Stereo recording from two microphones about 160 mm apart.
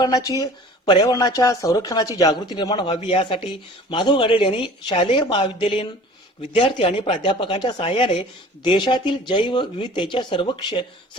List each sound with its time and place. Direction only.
0.0 s speech: 20° left (ahead or behind)